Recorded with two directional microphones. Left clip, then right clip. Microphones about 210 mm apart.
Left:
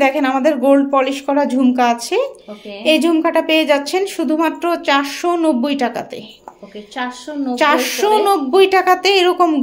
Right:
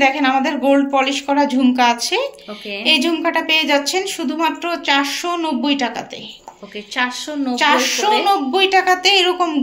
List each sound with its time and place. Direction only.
0.0 s a woman's voice: 45° left (ahead or behind)
7.0 s speech: 5° right (ahead or behind)
7.5 s a woman's voice: 50° left (ahead or behind)